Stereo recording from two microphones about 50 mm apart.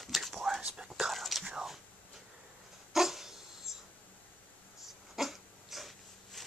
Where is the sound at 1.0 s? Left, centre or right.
Centre.